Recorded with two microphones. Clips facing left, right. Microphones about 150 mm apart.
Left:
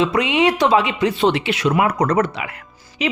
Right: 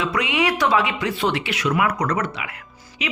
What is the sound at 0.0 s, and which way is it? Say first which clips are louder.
Speech: left 5 dB; 25° left (ahead or behind).